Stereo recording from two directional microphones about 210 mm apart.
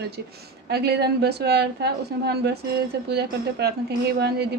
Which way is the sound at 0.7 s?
50° right (ahead or behind).